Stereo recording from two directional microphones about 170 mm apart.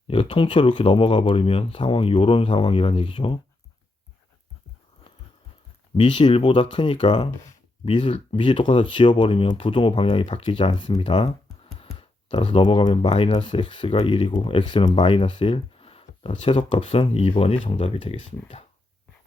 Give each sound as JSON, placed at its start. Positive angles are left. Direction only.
{"t": 0.1, "sound": "speech", "side_deg": 30}
{"t": 5.9, "sound": "speech", "side_deg": 25}